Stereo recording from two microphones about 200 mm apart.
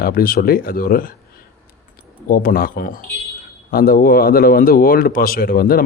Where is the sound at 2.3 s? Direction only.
45° left (ahead or behind).